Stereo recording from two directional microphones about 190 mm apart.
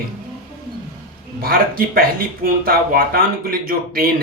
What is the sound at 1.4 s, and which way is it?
Speech, 50° right (ahead or behind).